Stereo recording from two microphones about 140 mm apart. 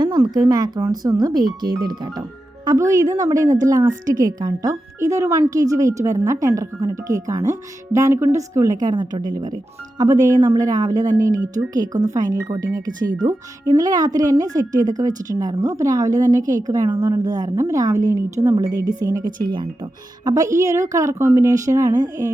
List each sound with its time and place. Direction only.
0.3 s speech: 25° right (ahead or behind)